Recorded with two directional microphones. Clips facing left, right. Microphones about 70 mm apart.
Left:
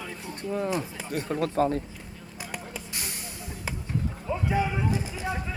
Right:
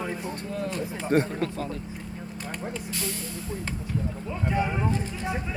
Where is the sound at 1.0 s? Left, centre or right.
Right.